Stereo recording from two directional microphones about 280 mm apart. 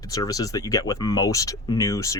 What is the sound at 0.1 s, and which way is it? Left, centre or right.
Speech, centre.